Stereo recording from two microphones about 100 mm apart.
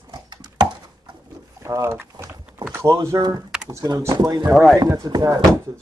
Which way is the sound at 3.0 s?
35° right (ahead or behind).